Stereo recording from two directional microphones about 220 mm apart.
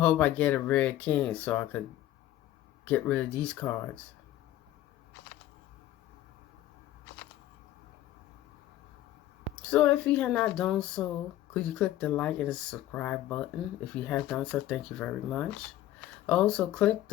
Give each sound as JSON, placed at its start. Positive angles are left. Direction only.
{"t": 0.0, "sound": "speech", "side_deg": 5}
{"t": 2.8, "sound": "speech", "side_deg": 5}
{"t": 9.6, "sound": "speech", "side_deg": 5}